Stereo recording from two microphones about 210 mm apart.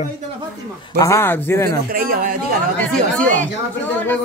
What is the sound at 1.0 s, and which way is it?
Speech, 10° left (ahead or behind).